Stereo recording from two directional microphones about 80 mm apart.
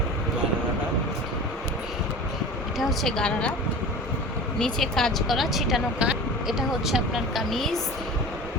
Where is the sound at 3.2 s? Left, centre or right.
Centre.